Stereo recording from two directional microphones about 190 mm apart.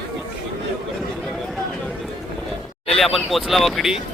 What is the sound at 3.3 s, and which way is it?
Speech, centre (ahead or behind).